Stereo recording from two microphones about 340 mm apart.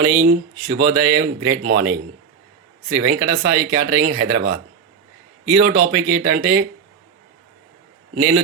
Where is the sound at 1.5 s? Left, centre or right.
Right.